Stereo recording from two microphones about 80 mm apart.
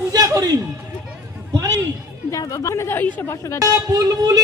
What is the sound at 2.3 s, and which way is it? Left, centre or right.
A woman's voice, left.